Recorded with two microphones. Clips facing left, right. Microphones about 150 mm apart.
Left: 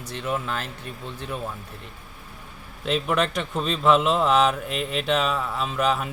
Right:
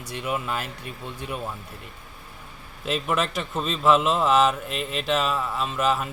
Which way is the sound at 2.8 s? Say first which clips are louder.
Left 2 dB; centre (ahead or behind).